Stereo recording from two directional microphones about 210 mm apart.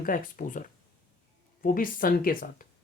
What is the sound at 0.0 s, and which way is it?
Speech, 40° left (ahead or behind).